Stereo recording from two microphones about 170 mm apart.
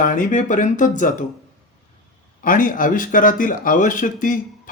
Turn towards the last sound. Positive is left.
turn(degrees=50)  # may be behind; listen again after turning